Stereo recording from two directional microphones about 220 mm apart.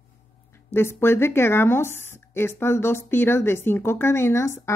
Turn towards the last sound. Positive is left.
turn(degrees=10)  # may be behind; listen again after turning